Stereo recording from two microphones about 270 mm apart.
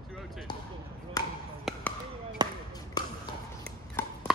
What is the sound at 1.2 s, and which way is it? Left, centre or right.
Chop, centre.